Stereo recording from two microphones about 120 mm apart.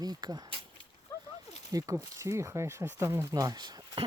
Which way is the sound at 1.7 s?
30° right (ahead or behind).